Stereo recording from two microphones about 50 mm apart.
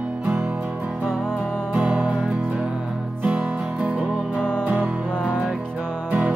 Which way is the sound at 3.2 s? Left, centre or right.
Right.